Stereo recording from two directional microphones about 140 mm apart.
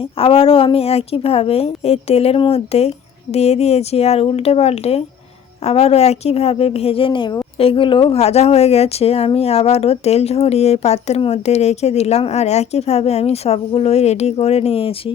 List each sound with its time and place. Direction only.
0.0 s speech: 40° left (ahead or behind)